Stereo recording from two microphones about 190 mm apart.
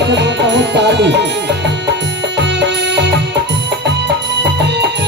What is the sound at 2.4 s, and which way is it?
Music, 65° right (ahead or behind).